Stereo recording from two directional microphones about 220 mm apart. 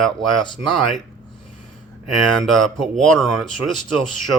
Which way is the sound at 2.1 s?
Centre (ahead or behind).